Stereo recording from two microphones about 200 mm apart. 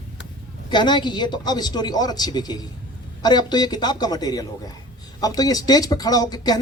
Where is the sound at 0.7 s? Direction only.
20° left (ahead or behind).